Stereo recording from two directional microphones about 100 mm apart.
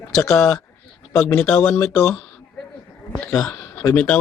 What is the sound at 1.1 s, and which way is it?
Speech, 25° left (ahead or behind).